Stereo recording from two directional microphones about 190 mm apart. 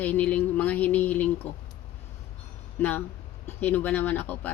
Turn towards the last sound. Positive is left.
turn(degrees=10)  # may be behind; listen again after turning